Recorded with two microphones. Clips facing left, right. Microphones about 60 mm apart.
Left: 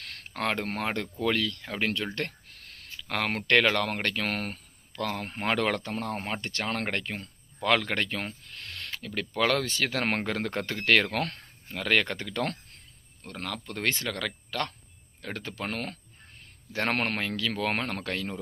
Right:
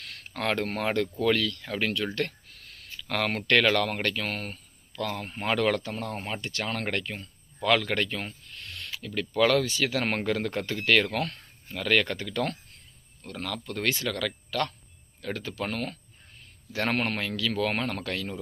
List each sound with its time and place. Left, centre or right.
0.3 s speech: left
4.3 s speech: left
4.9 s speech: left
8.4 s a sound: left
8.9 s speech: left
11.7 s speech: left
17.2 s speech: left